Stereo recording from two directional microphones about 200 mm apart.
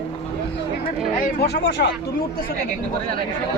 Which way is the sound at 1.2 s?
55° left (ahead or behind).